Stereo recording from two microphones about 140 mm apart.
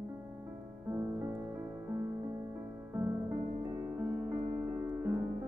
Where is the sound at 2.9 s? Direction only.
15° right (ahead or behind).